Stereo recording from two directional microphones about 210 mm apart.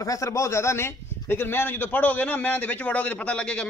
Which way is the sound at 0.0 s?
15° left (ahead or behind).